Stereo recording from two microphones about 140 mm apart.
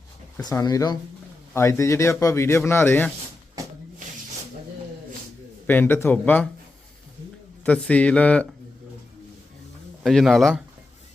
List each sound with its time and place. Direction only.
0.3 s a man's voice: 25° left (ahead or behind)
5.6 s speech: 15° left (ahead or behind)
7.6 s speech: 10° left (ahead or behind)
10.0 s a man's voice: centre (ahead or behind)